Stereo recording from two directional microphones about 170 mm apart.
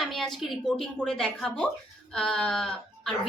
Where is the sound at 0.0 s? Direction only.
Centre (ahead or behind).